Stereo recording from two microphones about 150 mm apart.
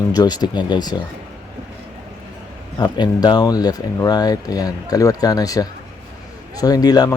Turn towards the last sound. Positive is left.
turn(degrees=25)  # may be behind; listen again after turning